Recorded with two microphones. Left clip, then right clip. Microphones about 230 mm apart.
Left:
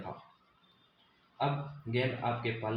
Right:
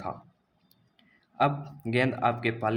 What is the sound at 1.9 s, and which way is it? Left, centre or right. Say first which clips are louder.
Speech: right 7 dB; right.